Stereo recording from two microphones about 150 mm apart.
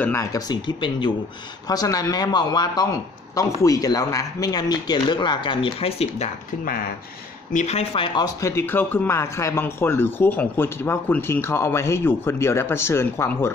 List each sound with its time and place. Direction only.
0.0 s speech: 20° left (ahead or behind); by 6.3 s 45° left (ahead or behind)
7.5 s speech: 45° left (ahead or behind); by 13.5 s 15° left (ahead or behind)